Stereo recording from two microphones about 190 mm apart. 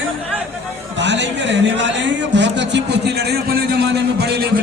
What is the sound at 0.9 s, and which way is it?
Speech, 65° right (ahead or behind).